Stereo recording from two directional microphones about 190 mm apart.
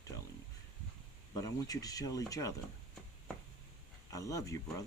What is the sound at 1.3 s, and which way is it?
Speech, 20° left (ahead or behind).